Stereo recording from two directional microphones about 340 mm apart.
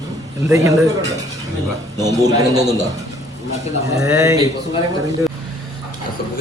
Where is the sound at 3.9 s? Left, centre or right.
Centre.